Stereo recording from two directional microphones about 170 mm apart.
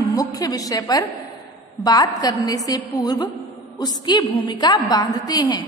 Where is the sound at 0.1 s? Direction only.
20° left (ahead or behind).